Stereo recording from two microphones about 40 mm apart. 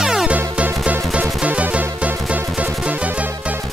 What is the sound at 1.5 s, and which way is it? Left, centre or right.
Music, right.